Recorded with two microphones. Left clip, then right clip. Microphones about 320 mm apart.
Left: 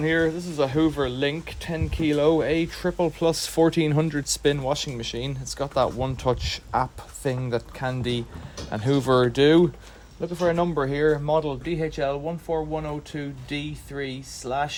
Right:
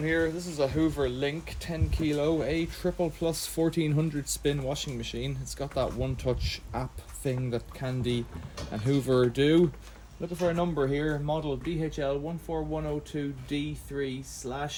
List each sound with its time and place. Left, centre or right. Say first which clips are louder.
0.0 s speech: left 5 dB; left